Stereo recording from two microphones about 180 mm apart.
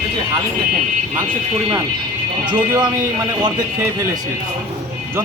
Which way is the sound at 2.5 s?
25° right (ahead or behind).